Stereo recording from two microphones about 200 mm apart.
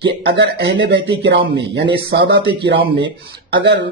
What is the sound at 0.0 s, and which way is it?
Speech, 60° right (ahead or behind).